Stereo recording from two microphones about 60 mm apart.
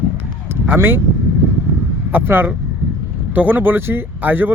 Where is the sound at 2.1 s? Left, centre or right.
Right.